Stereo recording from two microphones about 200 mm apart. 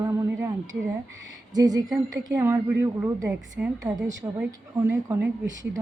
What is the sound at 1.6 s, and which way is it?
Speech, 20° right (ahead or behind).